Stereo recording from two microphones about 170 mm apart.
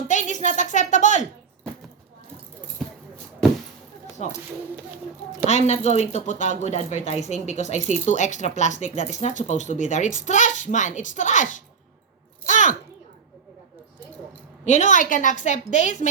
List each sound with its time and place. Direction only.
0.1 s speech: 45° left (ahead or behind)
4.2 s speech: 40° left (ahead or behind)
5.5 s speech: 40° left (ahead or behind)
12.5 s a sound: 45° left (ahead or behind)
14.6 s speech: 45° left (ahead or behind)